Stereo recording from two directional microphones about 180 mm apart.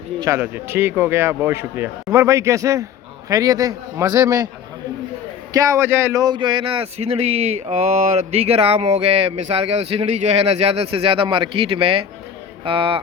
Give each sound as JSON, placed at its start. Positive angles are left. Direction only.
{"t": 0.2, "sound": "a man's voice", "side_deg": -15}
{"t": 5.5, "sound": "a man's voice", "side_deg": -15}